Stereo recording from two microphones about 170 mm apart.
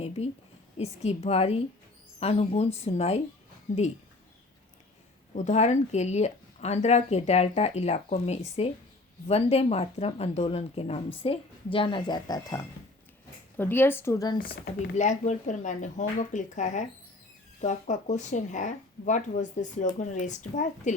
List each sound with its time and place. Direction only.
0.8 s a woman's voice: 40° left (ahead or behind)
5.3 s a woman's voice: 45° left (ahead or behind); by 14.4 s 20° left (ahead or behind)
14.4 s speech: 65° left (ahead or behind)
14.9 s speech: 45° left (ahead or behind)